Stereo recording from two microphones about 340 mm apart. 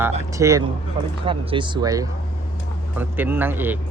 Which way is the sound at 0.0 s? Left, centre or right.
Centre.